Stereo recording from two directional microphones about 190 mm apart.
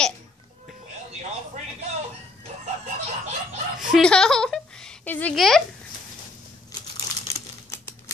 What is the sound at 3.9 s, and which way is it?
Speech, 5° left (ahead or behind).